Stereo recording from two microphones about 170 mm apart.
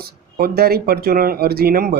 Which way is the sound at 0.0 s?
60° right (ahead or behind).